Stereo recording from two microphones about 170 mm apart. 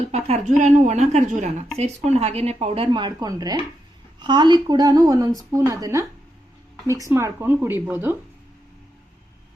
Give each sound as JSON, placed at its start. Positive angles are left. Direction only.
{"t": 0.1, "sound": "a woman's voice", "side_deg": -40}